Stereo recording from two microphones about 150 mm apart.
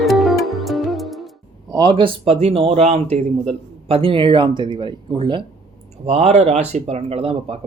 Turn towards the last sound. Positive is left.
turn(degrees=-40)  # may be behind; listen again after turning